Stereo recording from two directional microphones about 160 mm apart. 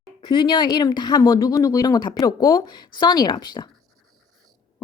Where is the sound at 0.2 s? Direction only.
30° left (ahead or behind).